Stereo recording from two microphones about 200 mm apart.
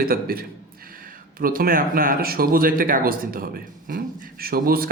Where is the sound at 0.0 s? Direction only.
45° right (ahead or behind).